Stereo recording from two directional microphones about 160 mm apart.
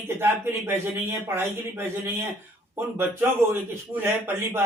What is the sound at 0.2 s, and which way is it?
A man's voice, 15° right (ahead or behind).